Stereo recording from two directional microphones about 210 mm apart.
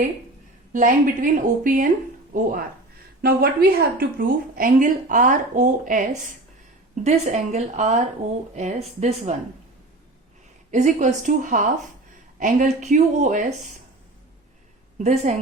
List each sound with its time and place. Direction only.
0.7 s speech: 40° right (ahead or behind)
10.7 s a woman's voice: 35° right (ahead or behind)
14.9 s a woman's voice: 35° right (ahead or behind)